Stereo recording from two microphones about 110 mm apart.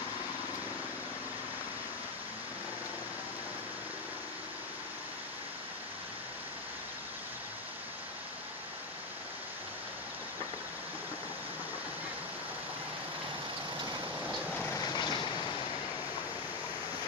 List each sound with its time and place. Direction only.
14.8 s vehicle: 40° left (ahead or behind)